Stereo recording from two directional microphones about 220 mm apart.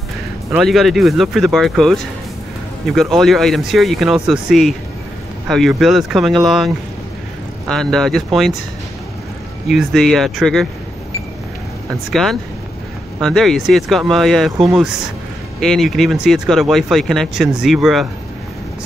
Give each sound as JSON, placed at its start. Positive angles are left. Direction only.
{"t": 0.5, "sound": "speech", "side_deg": 0}
{"t": 9.7, "sound": "speech", "side_deg": 0}
{"t": 12.1, "sound": "speech", "side_deg": 0}